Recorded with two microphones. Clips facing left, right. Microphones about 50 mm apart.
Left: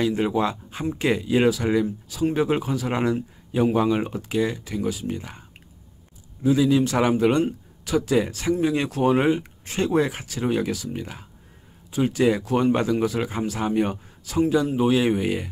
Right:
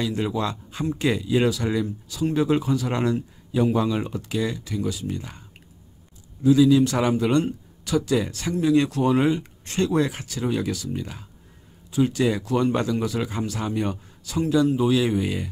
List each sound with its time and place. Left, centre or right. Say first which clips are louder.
0.0 s speech: left 3 dB; left
6.4 s speech: right 3 dB; left